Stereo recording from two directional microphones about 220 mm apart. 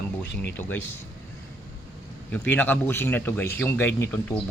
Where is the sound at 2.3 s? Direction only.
5° left (ahead or behind).